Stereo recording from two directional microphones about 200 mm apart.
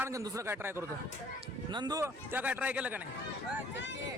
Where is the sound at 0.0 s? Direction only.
15° right (ahead or behind).